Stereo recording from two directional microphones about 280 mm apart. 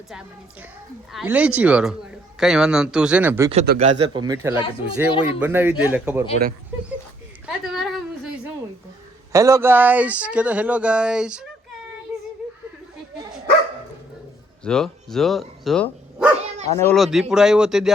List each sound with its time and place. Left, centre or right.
1.1 s speech: centre
3.5 s speech: right
5.1 s speech: centre
5.4 s speech: centre
7.4 s a sound: centre
9.3 s speech: centre
14.6 s speech: centre
16.4 s dog: right
16.7 s speech: centre